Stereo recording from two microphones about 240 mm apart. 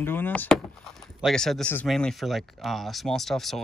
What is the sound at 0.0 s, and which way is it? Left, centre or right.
Speech, centre.